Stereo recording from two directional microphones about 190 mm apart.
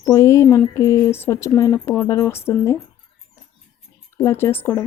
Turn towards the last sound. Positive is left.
turn(degrees=10)  # may be behind; listen again after turning